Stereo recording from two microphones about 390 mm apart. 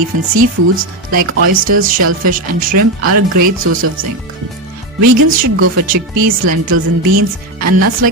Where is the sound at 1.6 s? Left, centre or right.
Right.